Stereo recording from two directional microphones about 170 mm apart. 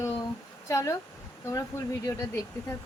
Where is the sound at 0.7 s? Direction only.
20° left (ahead or behind).